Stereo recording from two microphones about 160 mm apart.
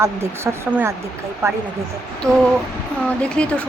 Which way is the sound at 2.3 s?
5° left (ahead or behind).